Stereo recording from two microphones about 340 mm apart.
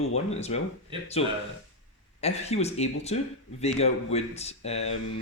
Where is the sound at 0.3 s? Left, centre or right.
Centre.